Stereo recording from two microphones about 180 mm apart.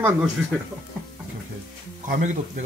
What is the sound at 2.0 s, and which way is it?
Speech, 45° right (ahead or behind).